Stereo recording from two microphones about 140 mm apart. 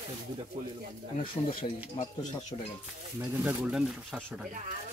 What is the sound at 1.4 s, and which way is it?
Speech, 15° left (ahead or behind).